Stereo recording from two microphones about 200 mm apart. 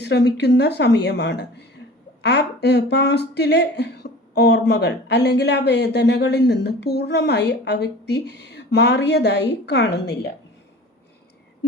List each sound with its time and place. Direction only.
0.0 s speech: 55° left (ahead or behind)